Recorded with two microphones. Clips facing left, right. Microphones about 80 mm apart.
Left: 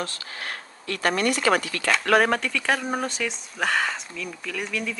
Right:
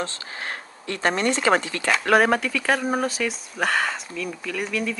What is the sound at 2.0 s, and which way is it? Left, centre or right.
Speech, centre.